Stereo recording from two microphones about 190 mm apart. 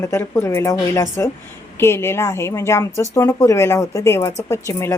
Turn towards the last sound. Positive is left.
turn(degrees=15)  # may be behind; listen again after turning